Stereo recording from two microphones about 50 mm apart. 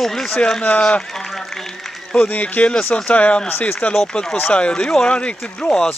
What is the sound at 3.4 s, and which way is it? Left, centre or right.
Speech, left.